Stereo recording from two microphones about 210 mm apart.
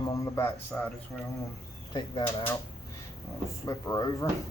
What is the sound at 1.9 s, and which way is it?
Speech, 25° left (ahead or behind).